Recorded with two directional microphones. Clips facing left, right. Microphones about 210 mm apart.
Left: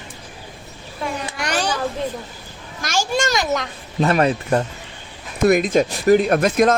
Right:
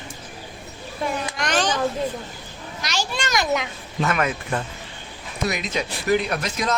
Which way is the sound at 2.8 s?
50° left (ahead or behind).